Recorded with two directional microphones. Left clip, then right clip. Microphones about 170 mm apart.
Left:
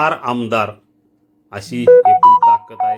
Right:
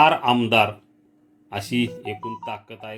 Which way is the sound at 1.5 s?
25° right (ahead or behind).